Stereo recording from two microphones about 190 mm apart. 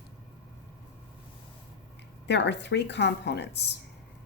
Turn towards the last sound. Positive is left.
turn(degrees=60)  # may be behind; listen again after turning